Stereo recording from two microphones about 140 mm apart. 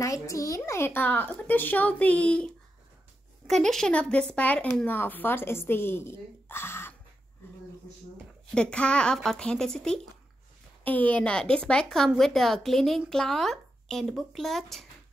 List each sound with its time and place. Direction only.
0.0 s speech: 25° left (ahead or behind)
7.4 s a sound: 15° left (ahead or behind)
8.5 s speech: 5° left (ahead or behind)